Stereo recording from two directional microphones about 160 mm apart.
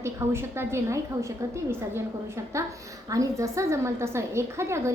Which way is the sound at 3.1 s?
20° right (ahead or behind).